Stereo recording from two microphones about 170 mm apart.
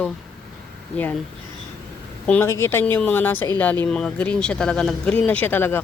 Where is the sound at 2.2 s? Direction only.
10° left (ahead or behind).